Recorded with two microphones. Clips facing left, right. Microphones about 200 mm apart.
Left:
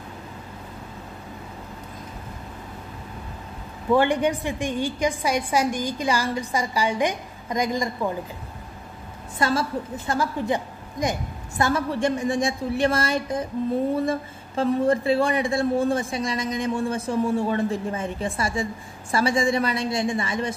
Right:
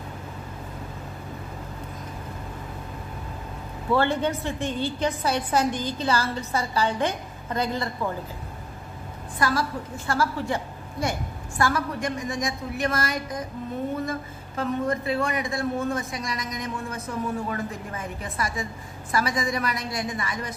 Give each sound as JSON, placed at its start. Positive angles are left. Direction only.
{"t": 3.9, "sound": "a woman's voice", "side_deg": 15}
{"t": 9.4, "sound": "speech", "side_deg": 25}